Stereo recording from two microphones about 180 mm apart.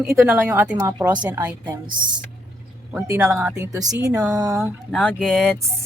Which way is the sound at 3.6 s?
20° right (ahead or behind).